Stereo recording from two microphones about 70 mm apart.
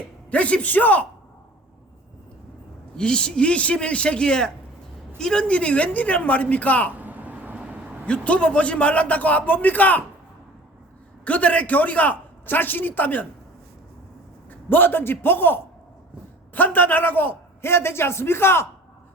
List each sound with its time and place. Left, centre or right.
0.3 s a man's voice: centre
3.0 s a man's voice: centre
7.0 s vehicle: right
8.0 s a man's voice: centre
11.3 s a man's voice: centre
14.7 s a man's voice: left